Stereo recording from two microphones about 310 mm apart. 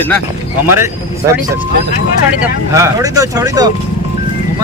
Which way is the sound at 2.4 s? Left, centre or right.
Centre.